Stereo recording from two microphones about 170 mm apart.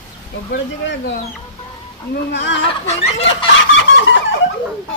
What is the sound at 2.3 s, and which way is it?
Speech, 90° left.